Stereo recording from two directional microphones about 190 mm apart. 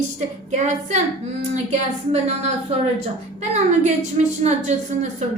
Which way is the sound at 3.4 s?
35° right (ahead or behind).